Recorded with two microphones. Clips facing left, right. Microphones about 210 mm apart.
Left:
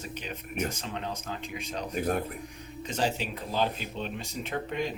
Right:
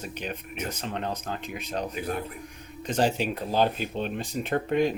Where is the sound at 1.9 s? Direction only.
45° left (ahead or behind).